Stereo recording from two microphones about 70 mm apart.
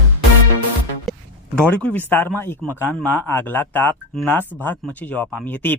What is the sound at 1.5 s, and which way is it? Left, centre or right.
Speech, centre.